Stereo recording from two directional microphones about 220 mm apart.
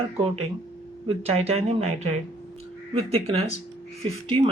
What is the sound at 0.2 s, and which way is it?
Speech, 25° right (ahead or behind).